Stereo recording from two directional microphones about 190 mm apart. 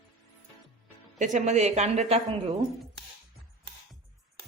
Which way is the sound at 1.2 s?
40° right (ahead or behind).